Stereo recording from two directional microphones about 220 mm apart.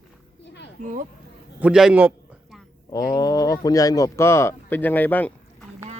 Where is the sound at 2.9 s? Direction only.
15° left (ahead or behind).